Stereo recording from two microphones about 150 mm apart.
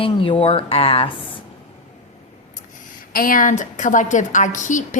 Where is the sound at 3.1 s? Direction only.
65° left (ahead or behind).